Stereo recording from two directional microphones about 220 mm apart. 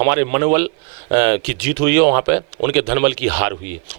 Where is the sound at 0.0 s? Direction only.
15° right (ahead or behind).